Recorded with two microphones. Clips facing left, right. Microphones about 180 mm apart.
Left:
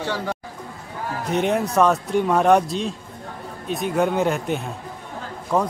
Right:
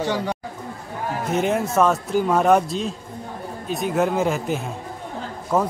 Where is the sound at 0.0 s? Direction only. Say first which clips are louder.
Right 3 dB; 15° right (ahead or behind).